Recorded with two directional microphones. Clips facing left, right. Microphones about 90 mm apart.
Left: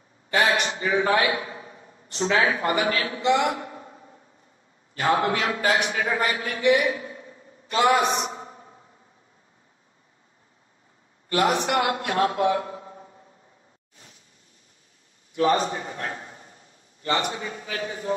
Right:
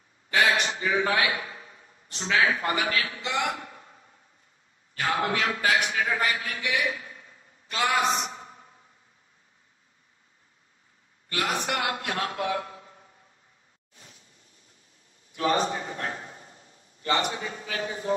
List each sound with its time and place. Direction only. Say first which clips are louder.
0.3 s a sound: left 2 dB; 35° left (ahead or behind)
2.1 s a man's voice: left 3 dB; 35° left (ahead or behind)
5.0 s a man's voice: left 4 dB; 30° left (ahead or behind)
11.2 s a man's voice: left 7 dB; 35° left (ahead or behind)
15.3 s a man's voice: left 3 dB; 35° left (ahead or behind)
16.2 s drawer open or close: even; 30° left (ahead or behind)
16.7 s a sound: left 1 dB; 30° left (ahead or behind)
17.7 s music: left 1 dB; 30° right (ahead or behind)